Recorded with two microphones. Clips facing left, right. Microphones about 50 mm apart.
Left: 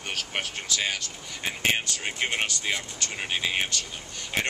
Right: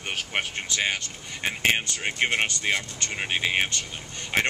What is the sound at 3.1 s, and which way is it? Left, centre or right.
Speech, right.